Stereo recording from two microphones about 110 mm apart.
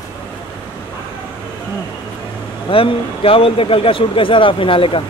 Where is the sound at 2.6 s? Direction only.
55° left (ahead or behind).